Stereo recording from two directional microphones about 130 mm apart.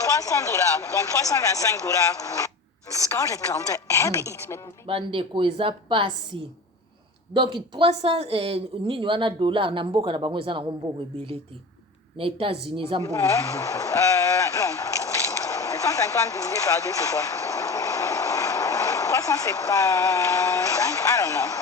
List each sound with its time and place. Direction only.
0.2 s speech: 25° left (ahead or behind)
4.9 s speech: 45° right (ahead or behind)
7.3 s speech: 35° right (ahead or behind)
12.1 s speech: 45° right (ahead or behind)
13.1 s speech: 25° left (ahead or behind)